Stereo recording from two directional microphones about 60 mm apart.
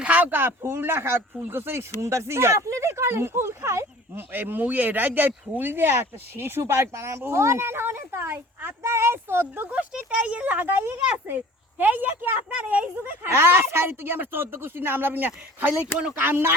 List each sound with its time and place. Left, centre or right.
0.0 s speech: right
2.0 s speech: right
4.3 s speech: right
8.8 s speech: right
9.6 s speech: right
13.2 s speech: right